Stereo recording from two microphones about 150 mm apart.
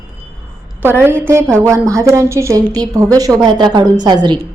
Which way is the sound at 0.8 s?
15° right (ahead or behind).